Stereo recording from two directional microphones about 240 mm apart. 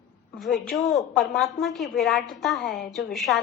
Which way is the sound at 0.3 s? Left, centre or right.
Centre.